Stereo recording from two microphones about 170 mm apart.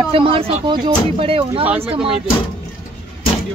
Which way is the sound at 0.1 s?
35° right (ahead or behind).